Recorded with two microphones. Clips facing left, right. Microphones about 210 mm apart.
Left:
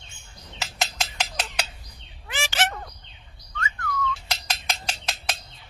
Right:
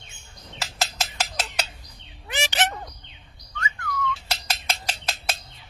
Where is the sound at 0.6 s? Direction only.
5° right (ahead or behind).